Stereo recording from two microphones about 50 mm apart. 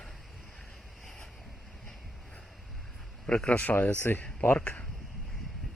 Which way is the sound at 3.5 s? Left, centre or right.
Left.